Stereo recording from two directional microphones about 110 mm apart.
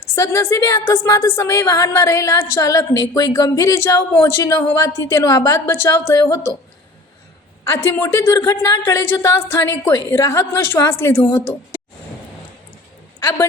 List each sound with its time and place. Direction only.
0.1 s a woman's voice: 25° left (ahead or behind)
7.6 s a woman's voice: 25° left (ahead or behind)
13.1 s speech: 25° left (ahead or behind)